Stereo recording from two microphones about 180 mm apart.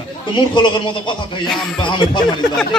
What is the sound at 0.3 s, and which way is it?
A man's voice, 25° left (ahead or behind).